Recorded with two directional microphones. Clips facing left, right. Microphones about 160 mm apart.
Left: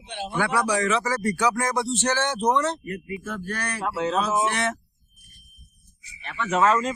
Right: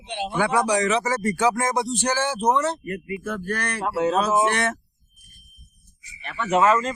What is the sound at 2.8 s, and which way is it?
Speech, 50° right (ahead or behind).